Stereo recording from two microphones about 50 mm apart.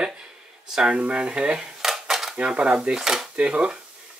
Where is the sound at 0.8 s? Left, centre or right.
Right.